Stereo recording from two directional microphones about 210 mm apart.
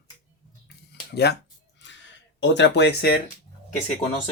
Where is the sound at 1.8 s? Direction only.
60° left (ahead or behind).